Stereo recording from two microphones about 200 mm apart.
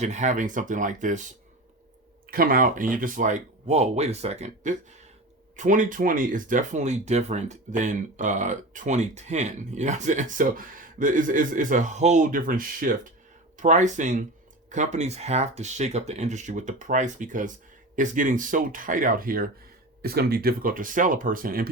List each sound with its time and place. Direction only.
0.0 s speech: 35° right (ahead or behind)
2.3 s speech: 45° right (ahead or behind)